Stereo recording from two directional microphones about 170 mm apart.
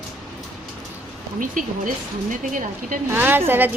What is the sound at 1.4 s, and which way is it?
Speech, 50° right (ahead or behind).